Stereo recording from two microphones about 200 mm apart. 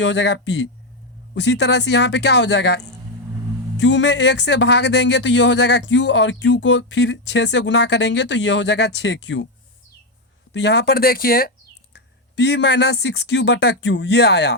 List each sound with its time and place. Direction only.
0.0 s speech: 60° left (ahead or behind)
10.5 s speech: 60° left (ahead or behind)
11.9 s speech: 60° left (ahead or behind)